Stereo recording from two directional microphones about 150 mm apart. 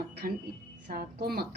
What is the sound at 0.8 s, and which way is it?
Speech, 90° right.